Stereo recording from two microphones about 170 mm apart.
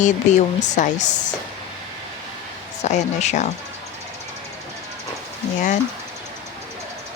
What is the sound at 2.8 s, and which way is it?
Speech, 40° left (ahead or behind).